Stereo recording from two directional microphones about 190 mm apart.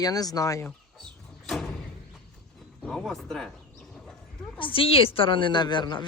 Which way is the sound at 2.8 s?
Centre (ahead or behind).